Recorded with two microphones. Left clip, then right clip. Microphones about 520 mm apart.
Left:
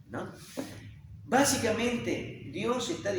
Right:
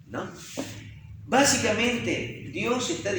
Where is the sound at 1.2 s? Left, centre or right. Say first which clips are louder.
Right 4 dB; left.